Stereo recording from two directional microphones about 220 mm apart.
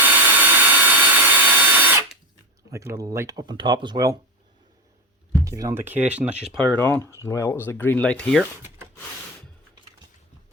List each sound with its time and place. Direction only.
0.0 s vacuum cleaner: 5° right (ahead or behind)
2.7 s speech: 15° right (ahead or behind)
5.5 s speech: 15° right (ahead or behind); by 8.4 s 5° left (ahead or behind)